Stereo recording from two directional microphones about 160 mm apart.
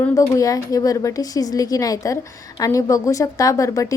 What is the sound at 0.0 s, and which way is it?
A woman's voice, 20° left (ahead or behind).